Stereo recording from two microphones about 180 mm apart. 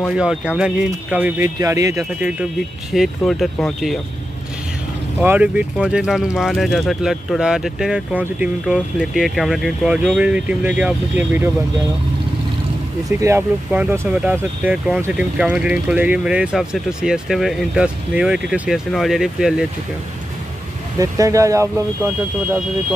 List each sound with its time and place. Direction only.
0.1 s speech: 5° right (ahead or behind)
5.2 s speech: 10° right (ahead or behind)
13.2 s speech: 10° right (ahead or behind)
21.0 s speech: 15° right (ahead or behind)